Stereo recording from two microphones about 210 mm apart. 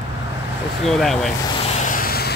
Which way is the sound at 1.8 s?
45° left (ahead or behind).